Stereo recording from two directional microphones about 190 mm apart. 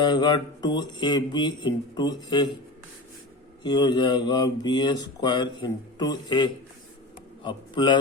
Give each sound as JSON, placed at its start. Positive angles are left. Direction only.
{"t": 0.0, "sound": "speech", "side_deg": 20}
{"t": 3.6, "sound": "speech", "side_deg": 20}